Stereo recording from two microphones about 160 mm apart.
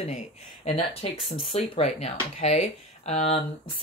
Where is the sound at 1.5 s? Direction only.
45° left (ahead or behind).